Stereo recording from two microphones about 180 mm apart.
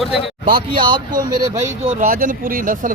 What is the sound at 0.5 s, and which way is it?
Speech, 30° right (ahead or behind).